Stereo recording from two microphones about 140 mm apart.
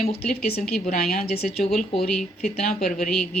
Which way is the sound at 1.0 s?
90° left.